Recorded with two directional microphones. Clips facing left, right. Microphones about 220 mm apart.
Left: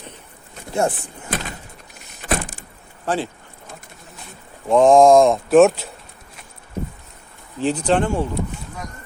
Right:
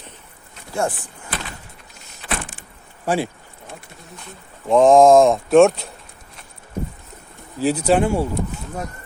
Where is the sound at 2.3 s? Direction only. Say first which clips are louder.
Left 5 dB; 40° left (ahead or behind).